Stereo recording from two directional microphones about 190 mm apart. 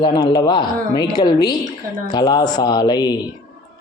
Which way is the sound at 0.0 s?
25° left (ahead or behind).